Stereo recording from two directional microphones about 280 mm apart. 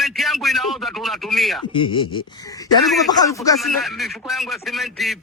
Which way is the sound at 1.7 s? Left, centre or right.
Centre.